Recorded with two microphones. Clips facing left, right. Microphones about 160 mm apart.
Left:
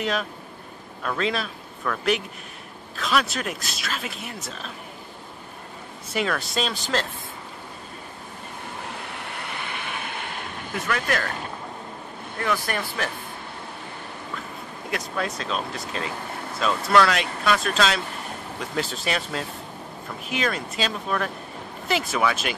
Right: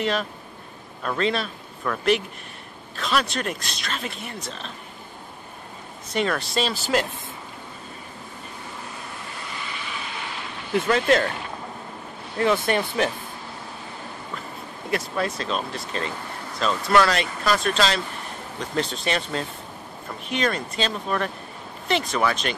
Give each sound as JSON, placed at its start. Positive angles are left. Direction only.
{"t": 0.0, "sound": "speech", "side_deg": 0}
{"t": 6.1, "sound": "speech", "side_deg": 0}
{"t": 9.1, "sound": "waves", "side_deg": 65}
{"t": 10.7, "sound": "speech", "side_deg": -25}
{"t": 12.4, "sound": "speech", "side_deg": -20}
{"t": 14.9, "sound": "speech", "side_deg": 0}